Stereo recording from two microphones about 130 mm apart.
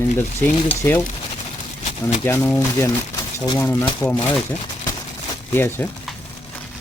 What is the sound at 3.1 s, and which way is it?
Crumpling, 35° left (ahead or behind).